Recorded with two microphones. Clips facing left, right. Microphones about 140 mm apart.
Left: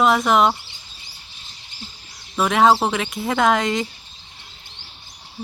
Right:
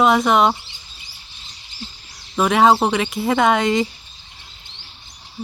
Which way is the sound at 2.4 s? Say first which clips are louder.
Right 2 dB; centre (ahead or behind).